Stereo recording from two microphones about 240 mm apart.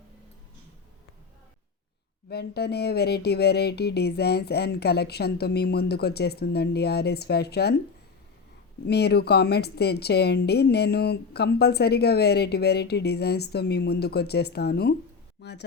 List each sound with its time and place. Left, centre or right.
2.3 s a woman's voice: left
8.9 s a woman's voice: left